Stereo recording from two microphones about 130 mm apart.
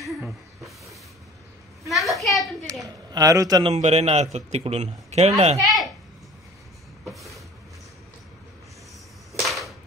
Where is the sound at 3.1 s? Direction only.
25° right (ahead or behind).